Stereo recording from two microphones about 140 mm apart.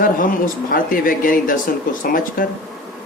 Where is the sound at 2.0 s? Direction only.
85° left.